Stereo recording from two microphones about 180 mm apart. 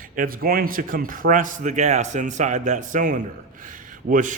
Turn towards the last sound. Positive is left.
turn(degrees=-45)  # may be behind; listen again after turning